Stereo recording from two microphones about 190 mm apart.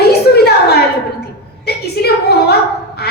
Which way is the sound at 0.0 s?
55° left (ahead or behind).